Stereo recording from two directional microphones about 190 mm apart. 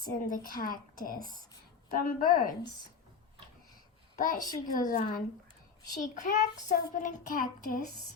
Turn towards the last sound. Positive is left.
turn(degrees=50)  # may be behind; listen again after turning